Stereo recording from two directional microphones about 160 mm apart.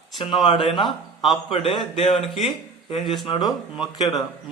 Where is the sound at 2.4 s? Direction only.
35° left (ahead or behind).